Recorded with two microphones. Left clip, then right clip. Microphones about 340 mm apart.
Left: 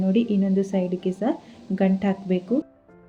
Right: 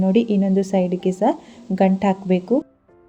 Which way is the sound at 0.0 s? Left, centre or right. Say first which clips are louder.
Right 5 dB; right.